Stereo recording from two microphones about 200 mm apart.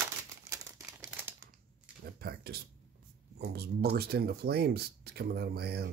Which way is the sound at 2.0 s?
50° right (ahead or behind).